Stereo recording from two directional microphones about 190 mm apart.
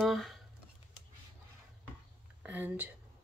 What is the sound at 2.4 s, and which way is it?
Speech, 10° right (ahead or behind).